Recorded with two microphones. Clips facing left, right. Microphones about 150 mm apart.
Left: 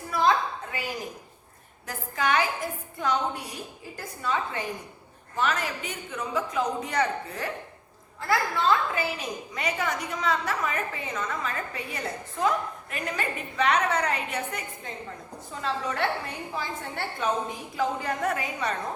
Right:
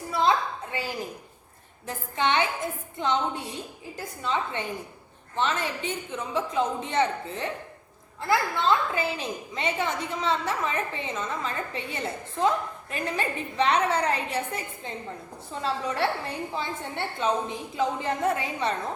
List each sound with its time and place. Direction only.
0.1 s a sound: 25° right (ahead or behind)
1.9 s a woman's voice: 25° right (ahead or behind)
9.0 s a woman's voice: 25° right (ahead or behind)
15.6 s a woman's voice: 30° right (ahead or behind)